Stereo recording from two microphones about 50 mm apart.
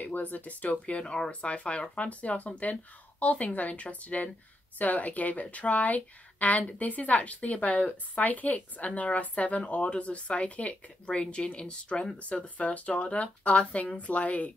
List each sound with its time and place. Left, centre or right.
0.0 s a woman's voice: left